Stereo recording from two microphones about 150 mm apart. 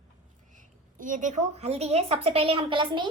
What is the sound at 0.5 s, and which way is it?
A woman's voice, 60° right (ahead or behind).